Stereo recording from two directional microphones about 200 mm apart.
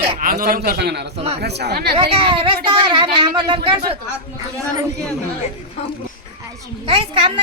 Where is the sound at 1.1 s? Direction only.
30° right (ahead or behind).